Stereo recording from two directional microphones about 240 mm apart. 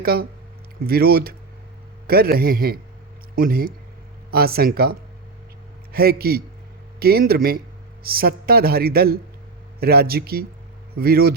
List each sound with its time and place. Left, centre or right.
0.0 s speech: right